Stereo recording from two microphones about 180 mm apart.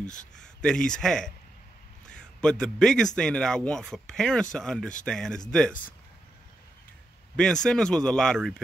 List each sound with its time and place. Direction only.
0.6 s a man's voice: 5° left (ahead or behind)
7.3 s speech: 5° left (ahead or behind)